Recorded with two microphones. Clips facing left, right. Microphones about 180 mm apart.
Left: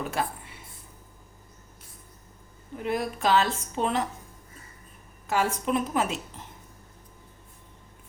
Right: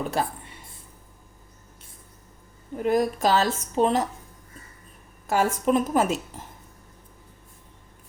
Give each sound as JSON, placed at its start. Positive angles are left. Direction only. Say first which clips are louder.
{"t": 0.1, "sound": "speech", "louder": "right 3 dB", "side_deg": -35}
{"t": 2.7, "sound": "a woman's voice", "louder": "right 7 dB", "side_deg": -40}
{"t": 5.3, "sound": "a woman's voice", "louder": "right 4 dB", "side_deg": -45}